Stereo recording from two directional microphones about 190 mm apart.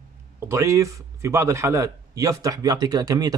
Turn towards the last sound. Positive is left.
turn(degrees=-20)  # may be behind; listen again after turning